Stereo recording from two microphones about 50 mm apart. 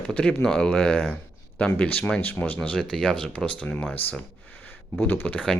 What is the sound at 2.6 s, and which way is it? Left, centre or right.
Speech, centre.